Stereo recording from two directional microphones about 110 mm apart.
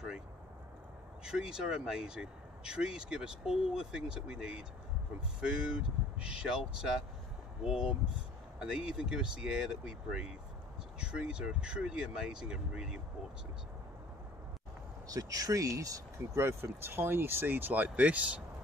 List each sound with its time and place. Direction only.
1.2 s speech: 5° right (ahead or behind)
15.0 s speech: 35° right (ahead or behind); by 18.4 s 10° right (ahead or behind)